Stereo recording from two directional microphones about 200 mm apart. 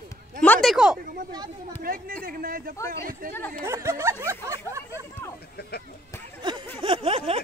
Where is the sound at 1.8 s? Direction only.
45° right (ahead or behind).